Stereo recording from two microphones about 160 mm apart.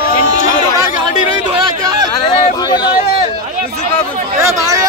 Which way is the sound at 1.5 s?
25° right (ahead or behind).